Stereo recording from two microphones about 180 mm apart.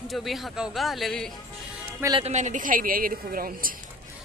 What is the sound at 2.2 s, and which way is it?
A woman's voice, 40° right (ahead or behind).